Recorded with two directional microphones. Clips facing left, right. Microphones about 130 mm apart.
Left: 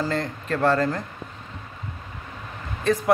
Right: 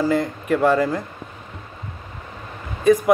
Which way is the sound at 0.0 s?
10° right (ahead or behind).